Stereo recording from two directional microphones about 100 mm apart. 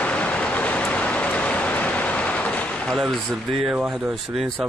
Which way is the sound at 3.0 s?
Centre (ahead or behind).